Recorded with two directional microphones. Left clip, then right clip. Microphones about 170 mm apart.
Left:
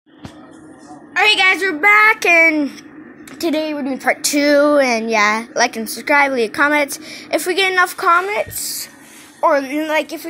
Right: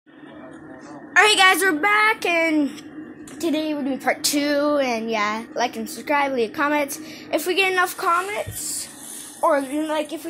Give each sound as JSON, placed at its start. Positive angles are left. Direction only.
{"t": 1.1, "sound": "a woman's voice", "side_deg": -10}
{"t": 1.8, "sound": "a woman's voice", "side_deg": 10}
{"t": 3.3, "sound": "a woman's voice", "side_deg": 20}
{"t": 4.4, "sound": "a woman's voice", "side_deg": 35}
{"t": 8.1, "sound": "a woman's voice", "side_deg": 20}
{"t": 9.4, "sound": "a woman's voice", "side_deg": 35}